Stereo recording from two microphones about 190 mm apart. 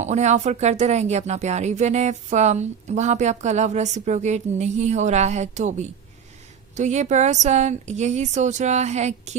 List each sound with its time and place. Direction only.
0.0 s speech: 40° right (ahead or behind)